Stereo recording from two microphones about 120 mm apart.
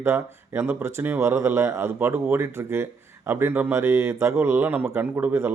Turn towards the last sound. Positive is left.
turn(degrees=-15)  # may be behind; listen again after turning